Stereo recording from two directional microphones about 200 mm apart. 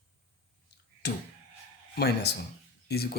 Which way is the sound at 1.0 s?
55° left (ahead or behind).